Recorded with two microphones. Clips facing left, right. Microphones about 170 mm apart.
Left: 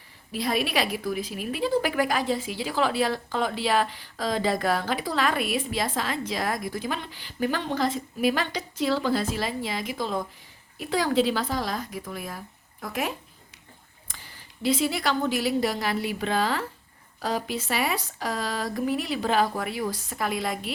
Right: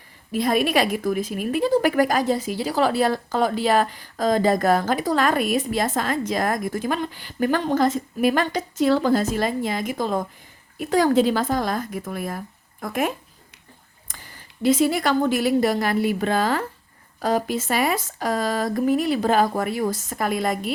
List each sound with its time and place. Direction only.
0.3 s a woman's voice: 50° right (ahead or behind)